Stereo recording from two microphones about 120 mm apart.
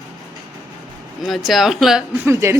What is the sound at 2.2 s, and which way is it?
Speech, 20° right (ahead or behind).